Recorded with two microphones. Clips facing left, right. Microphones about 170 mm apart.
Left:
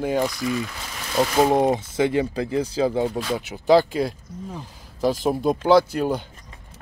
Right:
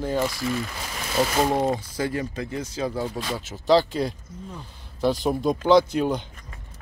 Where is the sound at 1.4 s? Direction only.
20° left (ahead or behind).